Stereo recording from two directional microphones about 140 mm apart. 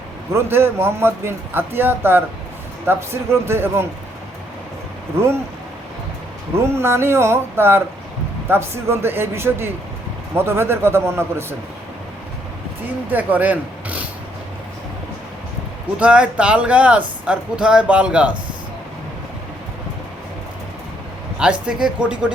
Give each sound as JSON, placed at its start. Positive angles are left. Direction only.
{"t": 0.3, "sound": "a man's voice", "side_deg": -15}
{"t": 6.7, "sound": "a man's voice", "side_deg": -15}
{"t": 13.1, "sound": "speech", "side_deg": -10}
{"t": 16.0, "sound": "a man's voice", "side_deg": -10}
{"t": 21.3, "sound": "a man's voice", "side_deg": -5}